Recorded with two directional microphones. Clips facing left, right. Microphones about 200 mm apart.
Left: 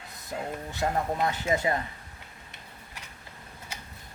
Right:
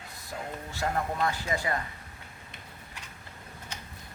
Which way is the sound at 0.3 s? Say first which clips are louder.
Left 4 dB; 20° left (ahead or behind).